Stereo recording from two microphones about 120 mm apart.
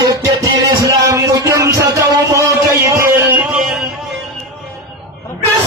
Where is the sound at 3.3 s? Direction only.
10° right (ahead or behind).